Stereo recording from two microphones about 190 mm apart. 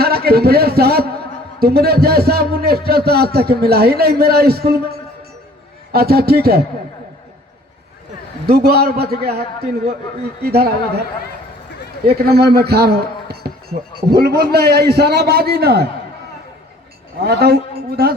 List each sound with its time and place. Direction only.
0.0 s a man's voice: 55° right (ahead or behind)
8.4 s a man's voice: 55° right (ahead or behind)
12.0 s a man's voice: 55° right (ahead or behind)
13.7 s speech: 45° right (ahead or behind)
14.1 s a man's voice: 55° right (ahead or behind)
17.2 s a man's voice: 55° right (ahead or behind)